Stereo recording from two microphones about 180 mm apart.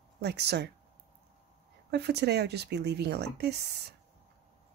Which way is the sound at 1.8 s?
65° right (ahead or behind).